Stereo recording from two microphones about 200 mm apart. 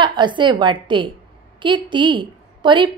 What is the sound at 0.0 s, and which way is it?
A woman's voice, 25° right (ahead or behind).